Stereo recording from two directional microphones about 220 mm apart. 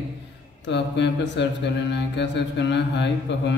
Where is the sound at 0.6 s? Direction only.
50° left (ahead or behind).